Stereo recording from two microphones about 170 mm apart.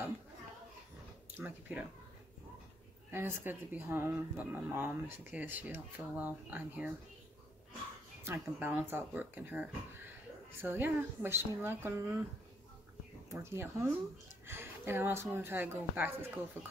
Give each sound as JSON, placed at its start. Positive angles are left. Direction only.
{"t": 1.3, "sound": "speech", "side_deg": -10}
{"t": 3.1, "sound": "speech", "side_deg": -15}
{"t": 8.2, "sound": "speech", "side_deg": -10}
{"t": 13.3, "sound": "speech", "side_deg": -15}